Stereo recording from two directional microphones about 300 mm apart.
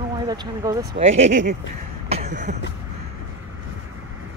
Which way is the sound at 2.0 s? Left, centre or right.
Right.